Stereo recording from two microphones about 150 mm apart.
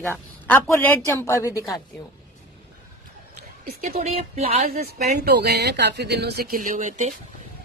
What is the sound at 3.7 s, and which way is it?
Speech, 65° right (ahead or behind).